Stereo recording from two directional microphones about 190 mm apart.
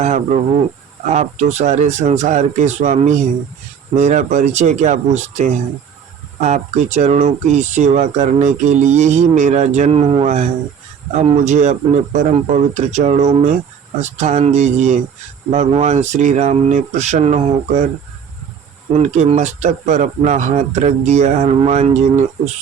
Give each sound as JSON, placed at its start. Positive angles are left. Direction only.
{"t": 0.0, "sound": "cricket", "side_deg": -40}
{"t": 1.1, "sound": "speech", "side_deg": -35}
{"t": 18.9, "sound": "speech", "side_deg": -35}